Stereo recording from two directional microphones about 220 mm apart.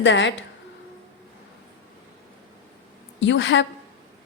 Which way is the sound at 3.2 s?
55° left (ahead or behind).